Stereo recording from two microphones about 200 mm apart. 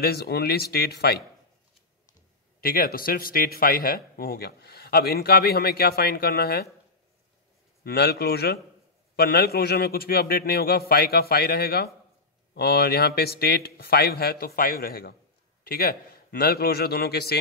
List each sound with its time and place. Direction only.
0.0 s speech: 55° left (ahead or behind)
2.6 s speech: 45° left (ahead or behind)
7.8 s speech: 55° left (ahead or behind)